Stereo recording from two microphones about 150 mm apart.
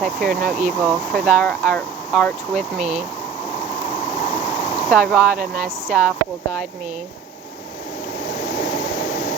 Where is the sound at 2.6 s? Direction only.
50° right (ahead or behind).